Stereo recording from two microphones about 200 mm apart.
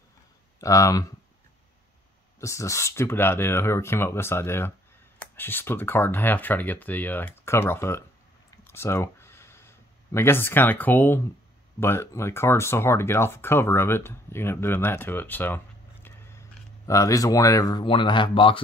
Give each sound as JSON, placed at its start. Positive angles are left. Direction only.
{"t": 0.6, "sound": "speech", "side_deg": 15}
{"t": 2.4, "sound": "speech", "side_deg": 15}
{"t": 8.6, "sound": "a sound", "side_deg": 10}
{"t": 11.8, "sound": "speech", "side_deg": 10}